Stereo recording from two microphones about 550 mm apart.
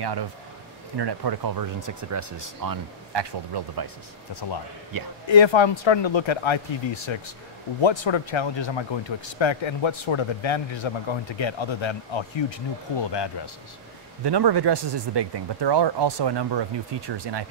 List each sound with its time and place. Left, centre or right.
0.0 s speech: right
4.3 s speech: left
14.2 s speech: right